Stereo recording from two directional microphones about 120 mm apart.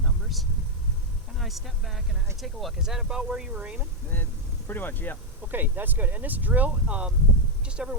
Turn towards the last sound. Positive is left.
turn(degrees=-10)  # may be behind; listen again after turning